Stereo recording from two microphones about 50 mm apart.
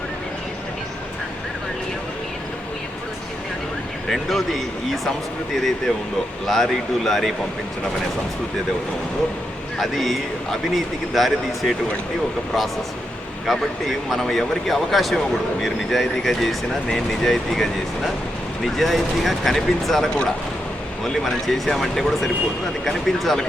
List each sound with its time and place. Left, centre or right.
4.1 s speech: centre
9.7 s speech: centre
13.5 s speech: centre